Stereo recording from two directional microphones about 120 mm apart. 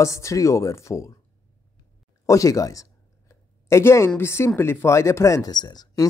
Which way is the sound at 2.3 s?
25° left (ahead or behind).